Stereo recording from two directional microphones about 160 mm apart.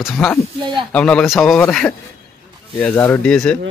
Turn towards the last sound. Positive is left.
turn(degrees=5)  # may be behind; listen again after turning